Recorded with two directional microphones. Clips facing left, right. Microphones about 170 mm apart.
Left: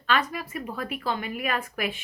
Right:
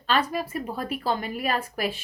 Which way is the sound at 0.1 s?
35° right (ahead or behind).